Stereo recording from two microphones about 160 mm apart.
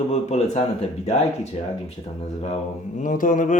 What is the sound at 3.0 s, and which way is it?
Speech, 55° left (ahead or behind).